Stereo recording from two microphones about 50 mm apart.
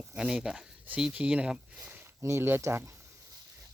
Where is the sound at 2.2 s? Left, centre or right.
Right.